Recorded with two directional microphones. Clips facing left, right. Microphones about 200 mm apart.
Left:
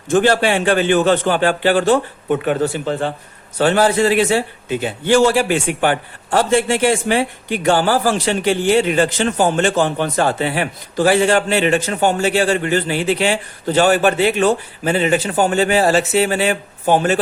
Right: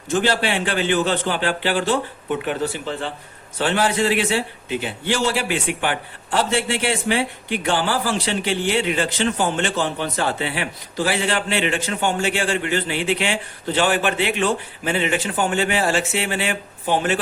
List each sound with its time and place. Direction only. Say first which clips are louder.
0.1 s a man's voice: left 6 dB; 50° left (ahead or behind)